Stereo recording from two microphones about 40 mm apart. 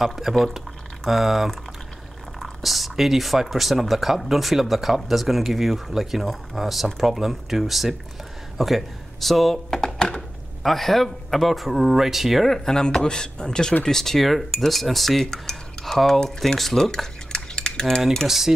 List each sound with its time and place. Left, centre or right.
0.0 s speech: centre
2.6 s speech: centre
10.6 s speech: centre
12.4 s cutlery: centre
16.3 s speech: centre
16.7 s cutlery: centre
18.2 s speech: centre